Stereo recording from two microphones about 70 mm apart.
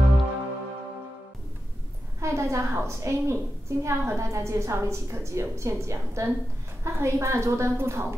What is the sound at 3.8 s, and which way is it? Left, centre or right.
A woman's voice, right.